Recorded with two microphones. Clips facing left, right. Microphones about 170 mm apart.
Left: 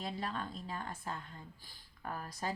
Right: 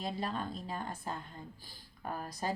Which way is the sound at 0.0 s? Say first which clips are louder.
Right 3 dB; 35° right (ahead or behind).